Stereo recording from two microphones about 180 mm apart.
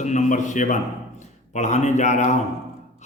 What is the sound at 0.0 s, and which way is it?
A man's voice, 40° left (ahead or behind).